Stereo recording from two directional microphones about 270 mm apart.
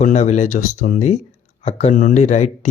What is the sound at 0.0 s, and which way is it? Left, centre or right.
Speech, left.